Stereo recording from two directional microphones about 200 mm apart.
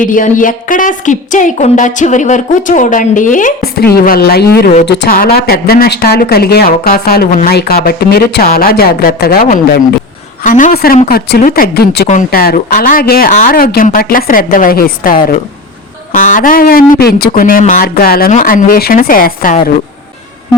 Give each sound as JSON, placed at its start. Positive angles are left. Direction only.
{"t": 0.0, "sound": "a woman's voice", "side_deg": 40}